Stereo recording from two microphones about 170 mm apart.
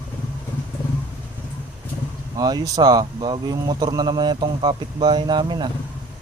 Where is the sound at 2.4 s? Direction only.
20° right (ahead or behind).